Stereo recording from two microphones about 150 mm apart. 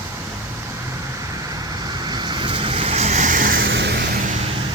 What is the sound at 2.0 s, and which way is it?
Vehicle, 30° right (ahead or behind).